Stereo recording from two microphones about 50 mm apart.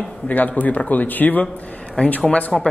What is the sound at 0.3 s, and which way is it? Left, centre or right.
A man's voice, left.